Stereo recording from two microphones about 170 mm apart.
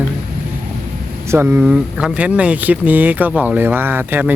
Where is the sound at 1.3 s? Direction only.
15° right (ahead or behind).